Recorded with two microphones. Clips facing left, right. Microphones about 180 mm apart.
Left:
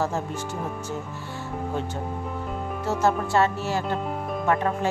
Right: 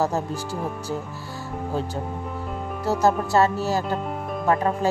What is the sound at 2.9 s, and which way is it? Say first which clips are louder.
Speech: right 3 dB; 40° right (ahead or behind).